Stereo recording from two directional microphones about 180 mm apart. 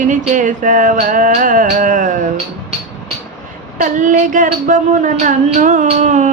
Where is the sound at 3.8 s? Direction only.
45° right (ahead or behind).